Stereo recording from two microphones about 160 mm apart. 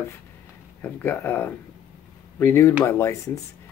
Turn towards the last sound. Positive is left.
turn(degrees=15)  # may be behind; listen again after turning